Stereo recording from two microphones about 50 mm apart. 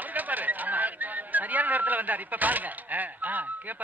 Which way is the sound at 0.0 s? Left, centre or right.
Right.